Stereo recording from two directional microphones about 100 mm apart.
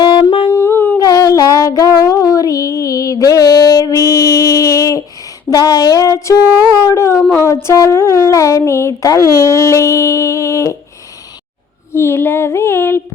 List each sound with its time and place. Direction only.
0.0 s humming: 40° left (ahead or behind)
0.5 s humming: 25° left (ahead or behind)
0.9 s a sound: 35° left (ahead or behind)
5.5 s speech: 40° left (ahead or behind)
6.2 s a sound: 30° left (ahead or behind)
7.3 s speech: 30° left (ahead or behind)
11.9 s speech: 25° left (ahead or behind)